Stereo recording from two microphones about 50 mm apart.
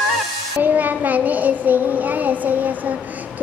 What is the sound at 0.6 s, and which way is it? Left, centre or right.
Child singing, right.